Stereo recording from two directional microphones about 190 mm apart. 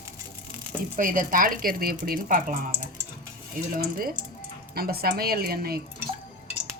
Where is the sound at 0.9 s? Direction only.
45° right (ahead or behind).